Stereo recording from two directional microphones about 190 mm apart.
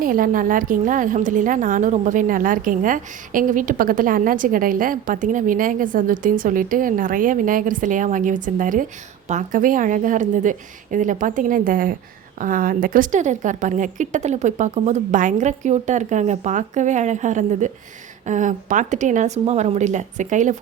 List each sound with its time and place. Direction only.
0.0 s a woman's voice: 45° right (ahead or behind)